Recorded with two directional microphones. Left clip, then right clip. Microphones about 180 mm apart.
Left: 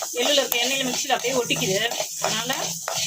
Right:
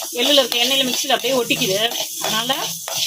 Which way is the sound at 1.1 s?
45° right (ahead or behind).